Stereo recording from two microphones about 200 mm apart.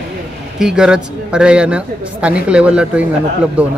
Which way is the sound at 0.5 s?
5° right (ahead or behind).